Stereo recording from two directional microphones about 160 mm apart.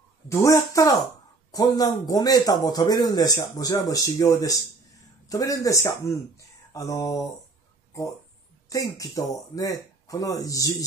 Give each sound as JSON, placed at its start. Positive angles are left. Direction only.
{"t": 0.3, "sound": "a man's voice", "side_deg": 20}
{"t": 8.6, "sound": "a man's voice", "side_deg": 20}